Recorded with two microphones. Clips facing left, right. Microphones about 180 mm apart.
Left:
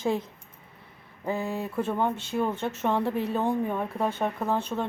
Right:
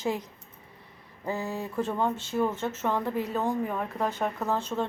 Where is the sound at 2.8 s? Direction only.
25° left (ahead or behind).